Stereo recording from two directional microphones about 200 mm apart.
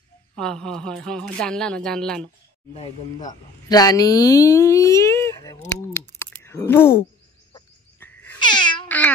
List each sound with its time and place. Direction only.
0.4 s speech: 5° left (ahead or behind)
2.7 s speech: 30° left (ahead or behind)
3.3 s speech: 20° left (ahead or behind)
5.9 s typing: 10° left (ahead or behind)
8.0 s wail: 10° left (ahead or behind)
8.4 s cat: 20° left (ahead or behind)
8.8 s a sound: 10° left (ahead or behind)